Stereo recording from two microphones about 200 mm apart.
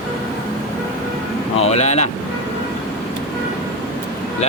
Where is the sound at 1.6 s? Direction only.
35° left (ahead or behind).